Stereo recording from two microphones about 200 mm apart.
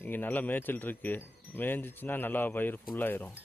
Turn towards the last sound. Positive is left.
turn(degrees=10)  # may be behind; listen again after turning